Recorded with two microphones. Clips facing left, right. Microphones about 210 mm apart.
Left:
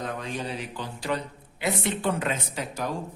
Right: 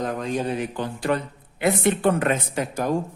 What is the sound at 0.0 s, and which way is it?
A man's voice, 45° right (ahead or behind).